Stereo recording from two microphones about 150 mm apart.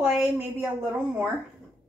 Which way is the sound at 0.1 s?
5° right (ahead or behind).